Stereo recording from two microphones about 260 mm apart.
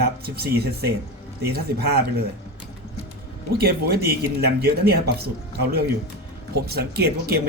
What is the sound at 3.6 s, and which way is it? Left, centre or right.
Speech, right.